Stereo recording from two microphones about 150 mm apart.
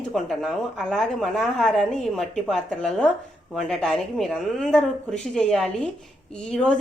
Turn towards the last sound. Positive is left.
turn(degrees=5)  # may be behind; listen again after turning